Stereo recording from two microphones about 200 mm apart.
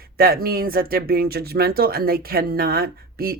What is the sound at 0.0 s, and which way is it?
Speech, 50° right (ahead or behind).